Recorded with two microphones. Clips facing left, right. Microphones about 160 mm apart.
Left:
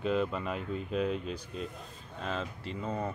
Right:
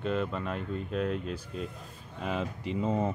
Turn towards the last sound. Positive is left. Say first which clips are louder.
# right 6 dB
turn(degrees=-20)  # may be behind; listen again after turning